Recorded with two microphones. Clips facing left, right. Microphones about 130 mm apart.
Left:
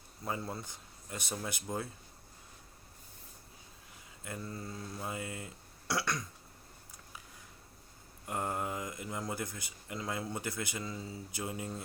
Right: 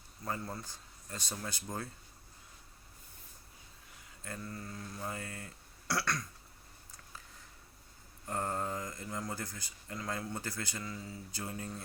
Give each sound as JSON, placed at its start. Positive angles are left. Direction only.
{"t": 0.3, "sound": "speech", "side_deg": 15}
{"t": 4.2, "sound": "speech", "side_deg": 20}
{"t": 4.9, "sound": "speech", "side_deg": 15}
{"t": 8.3, "sound": "speech", "side_deg": 15}